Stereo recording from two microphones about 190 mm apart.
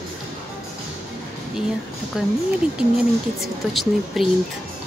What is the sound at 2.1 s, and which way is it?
Speech, centre (ahead or behind).